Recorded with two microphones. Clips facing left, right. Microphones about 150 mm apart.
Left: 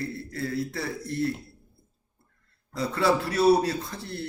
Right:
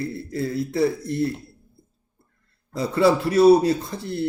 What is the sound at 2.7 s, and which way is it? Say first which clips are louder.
Speech: right 5 dB; 15° right (ahead or behind).